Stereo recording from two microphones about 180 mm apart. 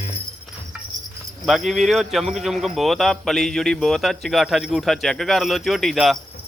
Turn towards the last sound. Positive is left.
turn(degrees=0)  # may be behind; listen again after turning